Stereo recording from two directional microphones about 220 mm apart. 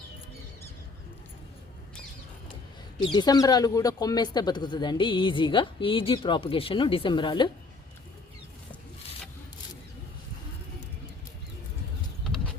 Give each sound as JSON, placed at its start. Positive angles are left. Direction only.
{"t": 3.1, "sound": "speech", "side_deg": 20}